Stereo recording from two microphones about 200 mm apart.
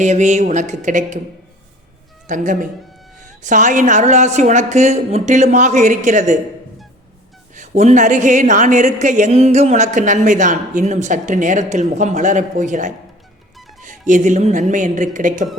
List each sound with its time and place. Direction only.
0.0 s a woman's voice: 35° right (ahead or behind)
2.2 s a woman's voice: 40° right (ahead or behind)
7.5 s a woman's voice: 35° right (ahead or behind)
14.1 s a woman's voice: 40° right (ahead or behind)